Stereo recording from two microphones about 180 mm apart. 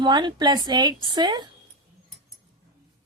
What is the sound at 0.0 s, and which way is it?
A woman's voice, 25° right (ahead or behind).